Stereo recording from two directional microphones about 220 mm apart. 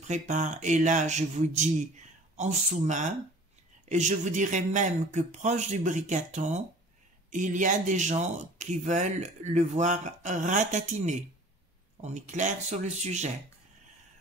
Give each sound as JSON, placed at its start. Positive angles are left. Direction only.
{"t": 0.0, "sound": "speech", "side_deg": -35}